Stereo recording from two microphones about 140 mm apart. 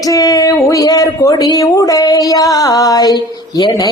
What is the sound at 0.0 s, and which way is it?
Speech, 25° left (ahead or behind).